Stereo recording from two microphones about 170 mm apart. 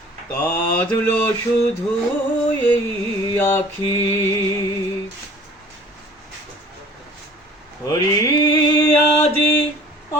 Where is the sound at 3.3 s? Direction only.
15° left (ahead or behind).